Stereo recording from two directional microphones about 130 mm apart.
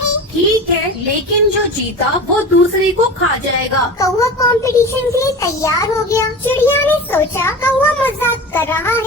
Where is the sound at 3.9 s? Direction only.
25° left (ahead or behind).